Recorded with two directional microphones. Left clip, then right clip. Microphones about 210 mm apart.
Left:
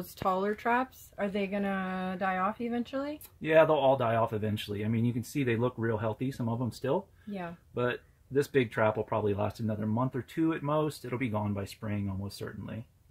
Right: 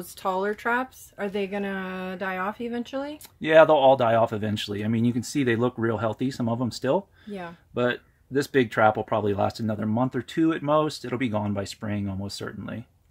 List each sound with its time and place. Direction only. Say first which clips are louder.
0.2 s speech: right 3 dB; 5° left (ahead or behind)
3.3 s speech: right 7 dB; 45° right (ahead or behind)